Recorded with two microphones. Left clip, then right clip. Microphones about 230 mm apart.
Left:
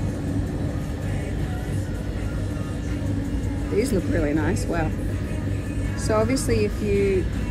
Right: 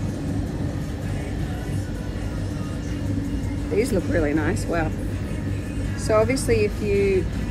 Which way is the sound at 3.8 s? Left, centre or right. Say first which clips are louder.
Right 2 dB; centre.